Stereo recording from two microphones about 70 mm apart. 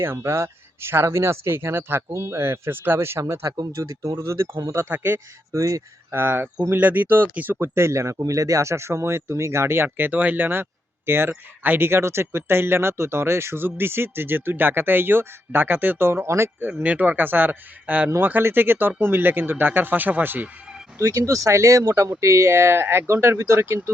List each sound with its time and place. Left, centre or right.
0.0 s speech: right
2.0 s speech: right
5.5 s speech: right
6.1 s speech: right
16.6 s speech: right
21.0 s speech: right